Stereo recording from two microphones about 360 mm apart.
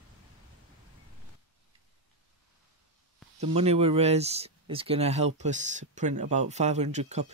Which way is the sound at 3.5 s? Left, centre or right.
Centre.